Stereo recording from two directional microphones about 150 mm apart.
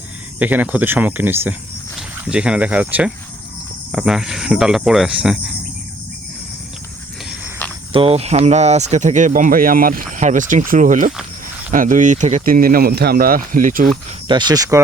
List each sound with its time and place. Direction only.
0.3 s speech: 10° right (ahead or behind)
3.9 s cricket: 5° right (ahead or behind)
7.9 s speech: 40° right (ahead or behind); by 13.8 s 65° right (ahead or behind)
14.3 s speech: 30° right (ahead or behind)